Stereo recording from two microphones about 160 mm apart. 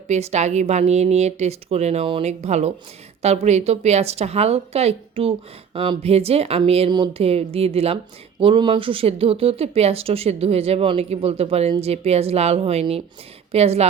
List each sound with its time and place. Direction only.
0.1 s speech: 45° right (ahead or behind)